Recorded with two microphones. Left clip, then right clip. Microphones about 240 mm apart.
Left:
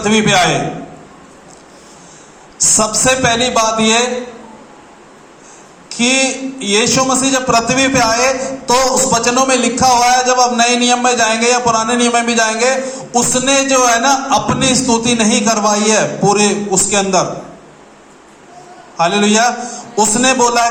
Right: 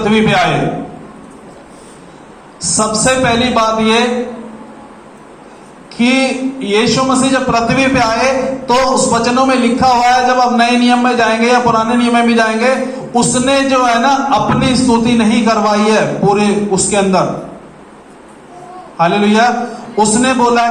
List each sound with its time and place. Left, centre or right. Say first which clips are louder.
0.0 s a man's voice: even; left
2.6 s a man's voice: left 1 dB; left
5.9 s a man's voice: right 1 dB; left
18.9 s a man's voice: right 1 dB; left